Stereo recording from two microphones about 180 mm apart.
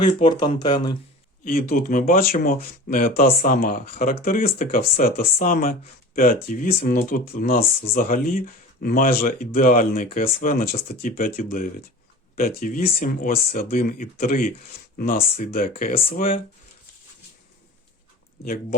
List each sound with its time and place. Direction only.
0.3 s speech: 25° left (ahead or behind)
1.5 s speech: 50° left (ahead or behind)